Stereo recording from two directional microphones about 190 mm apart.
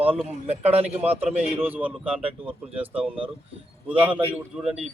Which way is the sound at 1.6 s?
10° right (ahead or behind).